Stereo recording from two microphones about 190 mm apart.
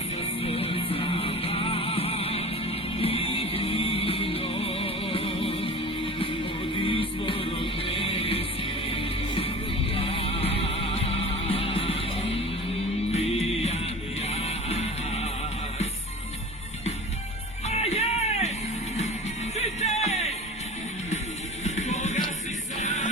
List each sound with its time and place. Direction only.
0.4 s music: 30° left (ahead or behind)
17.7 s music: 35° left (ahead or behind)
19.5 s music: 35° left (ahead or behind)
21.6 s music: 35° left (ahead or behind)